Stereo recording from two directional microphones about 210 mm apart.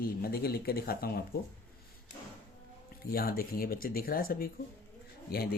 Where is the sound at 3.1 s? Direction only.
45° left (ahead or behind).